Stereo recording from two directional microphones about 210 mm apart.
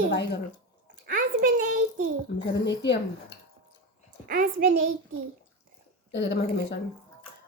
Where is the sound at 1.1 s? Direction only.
40° right (ahead or behind).